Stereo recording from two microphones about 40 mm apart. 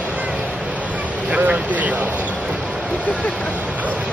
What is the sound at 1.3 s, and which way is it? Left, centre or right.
Vehicle, right.